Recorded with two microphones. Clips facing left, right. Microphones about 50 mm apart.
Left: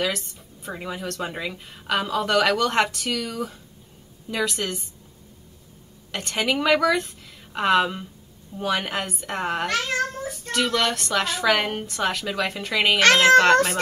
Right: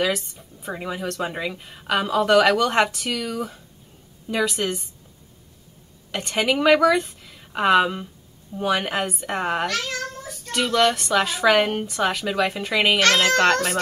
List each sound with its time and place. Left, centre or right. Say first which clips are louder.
0.0 s speech: right 3 dB; centre
6.1 s speech: right 2 dB; centre
9.7 s cat: left 3 dB; left
10.5 s speech: right 3 dB; centre
13.0 s speech: left 6 dB; left